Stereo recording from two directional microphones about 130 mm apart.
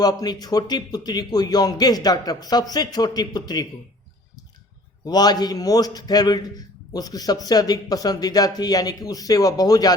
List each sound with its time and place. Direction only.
0.0 s a man's voice: 30° left (ahead or behind)
5.0 s a man's voice: 30° left (ahead or behind)